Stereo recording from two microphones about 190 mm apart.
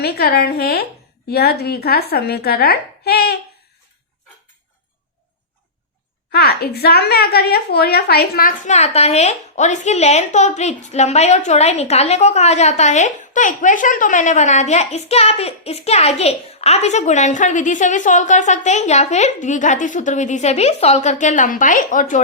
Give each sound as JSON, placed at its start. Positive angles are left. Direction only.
{"t": 0.0, "sound": "speech", "side_deg": 55}
{"t": 6.3, "sound": "a woman's voice", "side_deg": 55}